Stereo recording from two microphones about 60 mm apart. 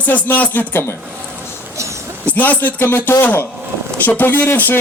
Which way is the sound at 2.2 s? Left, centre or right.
Left.